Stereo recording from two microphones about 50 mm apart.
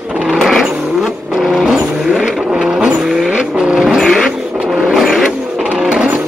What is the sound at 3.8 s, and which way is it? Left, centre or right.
Vehicle, centre.